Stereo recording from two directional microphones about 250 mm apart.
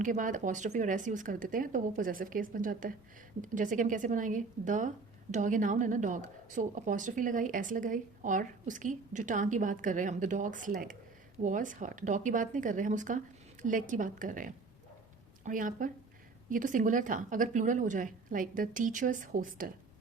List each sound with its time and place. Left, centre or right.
0.0 s speech: right